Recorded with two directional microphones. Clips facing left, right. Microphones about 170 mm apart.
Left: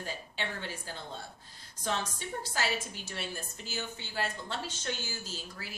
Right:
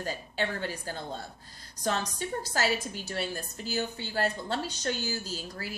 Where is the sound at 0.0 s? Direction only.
45° right (ahead or behind).